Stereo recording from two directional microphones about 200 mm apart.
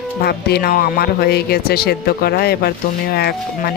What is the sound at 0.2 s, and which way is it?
Speech, 50° left (ahead or behind).